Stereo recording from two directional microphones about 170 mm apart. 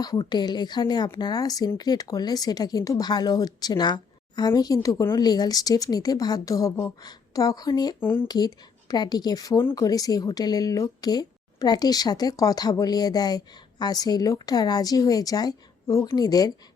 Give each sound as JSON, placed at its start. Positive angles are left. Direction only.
{"t": 0.0, "sound": "a woman's voice", "side_deg": 25}
{"t": 7.9, "sound": "a woman's voice", "side_deg": 15}